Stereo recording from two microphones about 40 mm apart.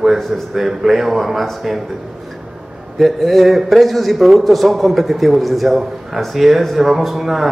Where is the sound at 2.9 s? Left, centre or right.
Centre.